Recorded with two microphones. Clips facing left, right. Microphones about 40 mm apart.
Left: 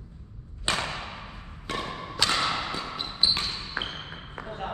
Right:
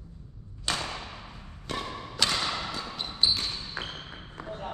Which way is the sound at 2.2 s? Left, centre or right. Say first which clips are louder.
Left 3 dB; left.